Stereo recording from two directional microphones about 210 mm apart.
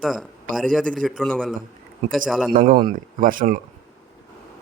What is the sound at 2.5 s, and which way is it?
Speech, 40° right (ahead or behind).